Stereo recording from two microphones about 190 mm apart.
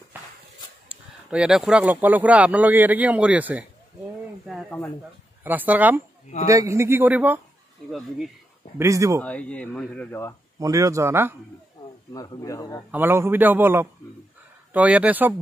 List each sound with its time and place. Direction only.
0.8 s speech: 5° right (ahead or behind)
4.6 s speech: 10° left (ahead or behind)
5.4 s speech: 10° right (ahead or behind)
8.7 s speech: 15° right (ahead or behind)
9.2 s speech: 5° left (ahead or behind)
10.6 s speech: 15° right (ahead or behind)
12.1 s speech: 15° left (ahead or behind)
12.9 s speech: 10° right (ahead or behind)